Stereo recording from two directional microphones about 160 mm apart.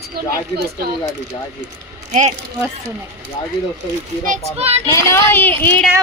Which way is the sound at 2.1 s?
45° right (ahead or behind).